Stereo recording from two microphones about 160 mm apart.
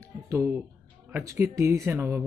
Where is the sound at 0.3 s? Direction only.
15° right (ahead or behind).